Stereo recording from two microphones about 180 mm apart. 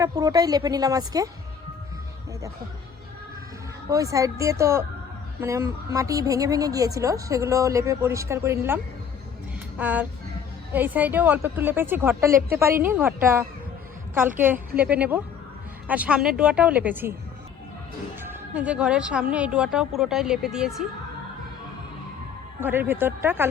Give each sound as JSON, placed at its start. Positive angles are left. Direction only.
{"t": 0.0, "sound": "a woman's voice", "side_deg": -20}
{"t": 3.8, "sound": "a woman's voice", "side_deg": -20}
{"t": 18.2, "sound": "a woman's voice", "side_deg": -10}
{"t": 22.6, "sound": "a woman's voice", "side_deg": -10}